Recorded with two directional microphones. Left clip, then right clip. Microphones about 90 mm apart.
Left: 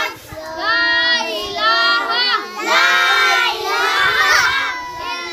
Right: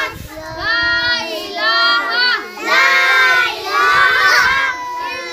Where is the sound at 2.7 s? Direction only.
35° right (ahead or behind).